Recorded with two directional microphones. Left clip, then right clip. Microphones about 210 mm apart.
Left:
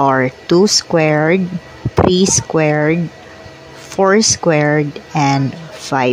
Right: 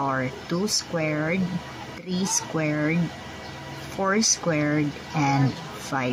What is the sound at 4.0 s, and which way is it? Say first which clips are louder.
Speech: left 11 dB; 35° left (ahead or behind).